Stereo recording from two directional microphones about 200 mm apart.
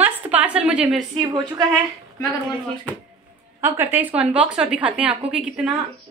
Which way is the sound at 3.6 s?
10° right (ahead or behind).